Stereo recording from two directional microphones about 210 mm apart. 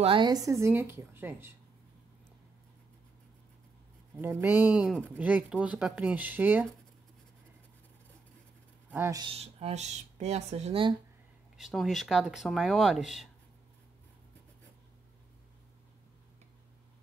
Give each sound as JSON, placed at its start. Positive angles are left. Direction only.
{"t": 0.0, "sound": "speech", "side_deg": -25}
{"t": 4.2, "sound": "speech", "side_deg": -10}
{"t": 8.9, "sound": "speech", "side_deg": -15}
{"t": 11.5, "sound": "speech", "side_deg": 0}